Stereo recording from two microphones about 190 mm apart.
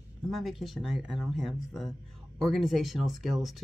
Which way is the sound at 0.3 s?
Centre (ahead or behind).